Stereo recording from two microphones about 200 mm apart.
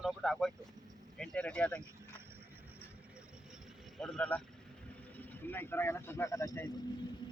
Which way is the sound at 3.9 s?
Centre (ahead or behind).